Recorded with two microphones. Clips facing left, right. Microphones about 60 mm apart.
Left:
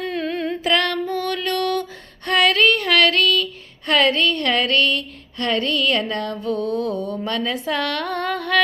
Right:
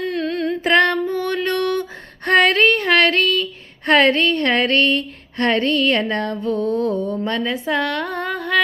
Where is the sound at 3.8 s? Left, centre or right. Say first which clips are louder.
Right 3 dB; right.